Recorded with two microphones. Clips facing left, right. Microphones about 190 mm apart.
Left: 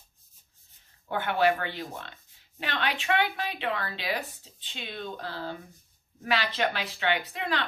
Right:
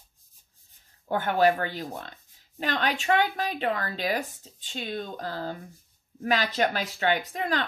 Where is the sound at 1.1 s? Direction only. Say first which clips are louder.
Right 3 dB; 45° right (ahead or behind).